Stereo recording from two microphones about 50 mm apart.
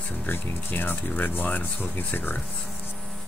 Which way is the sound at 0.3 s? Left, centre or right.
Left.